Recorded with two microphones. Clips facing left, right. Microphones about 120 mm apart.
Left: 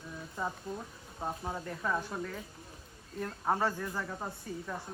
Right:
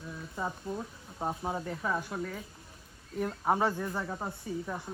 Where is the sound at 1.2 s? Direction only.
25° right (ahead or behind).